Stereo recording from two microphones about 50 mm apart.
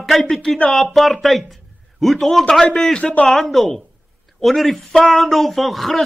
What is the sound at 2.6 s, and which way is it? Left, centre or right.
Speech, centre.